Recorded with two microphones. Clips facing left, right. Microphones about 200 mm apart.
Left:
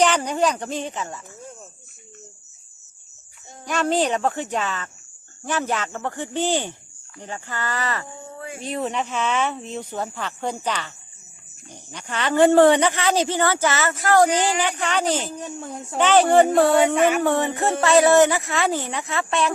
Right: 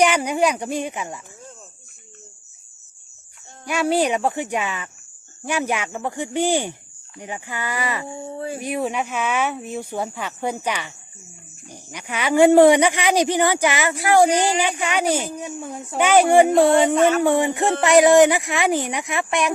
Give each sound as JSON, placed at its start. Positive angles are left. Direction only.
{"t": 0.0, "sound": "speech", "side_deg": -10}
{"t": 3.7, "sound": "speech", "side_deg": -10}
{"t": 8.0, "sound": "a sound", "side_deg": -30}
{"t": 8.6, "sound": "speech", "side_deg": -10}
{"t": 16.9, "sound": "speech", "side_deg": 10}
{"t": 17.2, "sound": "speech", "side_deg": -10}